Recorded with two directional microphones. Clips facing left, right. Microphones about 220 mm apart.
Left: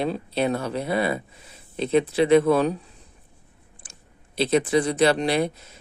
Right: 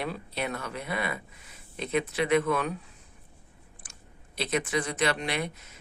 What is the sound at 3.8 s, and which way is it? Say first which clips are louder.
Chewing: left 2 dB; 25° left (ahead or behind).